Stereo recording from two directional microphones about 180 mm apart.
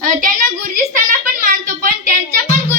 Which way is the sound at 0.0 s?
45° right (ahead or behind).